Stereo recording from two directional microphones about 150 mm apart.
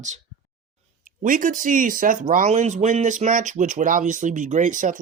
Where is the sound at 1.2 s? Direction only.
60° right (ahead or behind).